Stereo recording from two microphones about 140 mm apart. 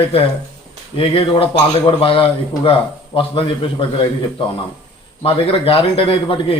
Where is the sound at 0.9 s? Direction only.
40° left (ahead or behind).